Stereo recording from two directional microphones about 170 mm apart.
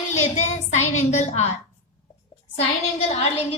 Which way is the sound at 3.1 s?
35° left (ahead or behind).